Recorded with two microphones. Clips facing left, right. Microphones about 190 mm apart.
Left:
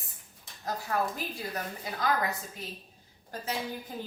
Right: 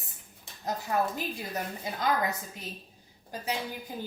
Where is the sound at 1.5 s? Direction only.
20° right (ahead or behind).